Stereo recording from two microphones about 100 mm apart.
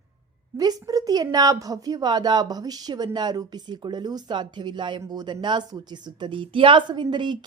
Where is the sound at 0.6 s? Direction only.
40° right (ahead or behind).